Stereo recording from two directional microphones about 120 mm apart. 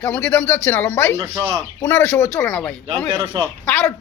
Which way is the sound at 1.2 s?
25° right (ahead or behind).